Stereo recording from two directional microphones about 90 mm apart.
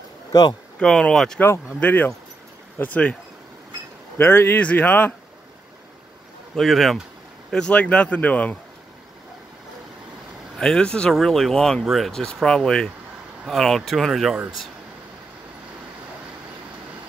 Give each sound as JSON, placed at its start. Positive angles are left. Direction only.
{"t": 0.3, "sound": "speech", "side_deg": 50}
{"t": 0.7, "sound": "speech", "side_deg": 10}
{"t": 1.8, "sound": "speech", "side_deg": 20}
{"t": 4.2, "sound": "speech", "side_deg": 25}
{"t": 6.5, "sound": "speech", "side_deg": 0}
{"t": 7.5, "sound": "speech", "side_deg": 10}
{"t": 10.6, "sound": "speech", "side_deg": 10}